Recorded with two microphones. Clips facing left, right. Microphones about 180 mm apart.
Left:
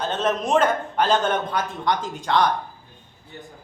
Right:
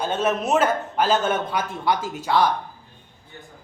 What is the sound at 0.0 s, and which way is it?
A man's voice, 10° right (ahead or behind).